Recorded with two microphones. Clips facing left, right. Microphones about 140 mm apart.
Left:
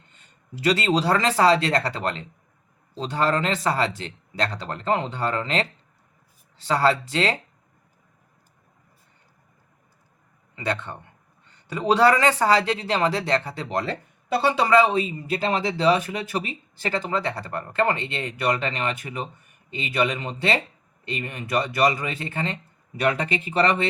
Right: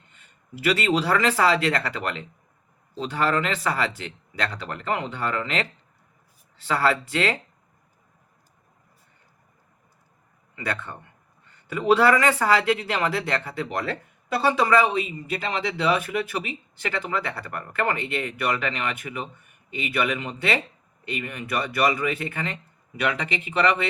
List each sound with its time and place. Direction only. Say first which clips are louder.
0.6 s speech: left 1 dB; 35° left (ahead or behind)
6.7 s speech: left 2 dB; 30° left (ahead or behind)
10.5 s speech: left 3 dB; 25° left (ahead or behind)
18.3 s speech: left 4 dB; 35° left (ahead or behind)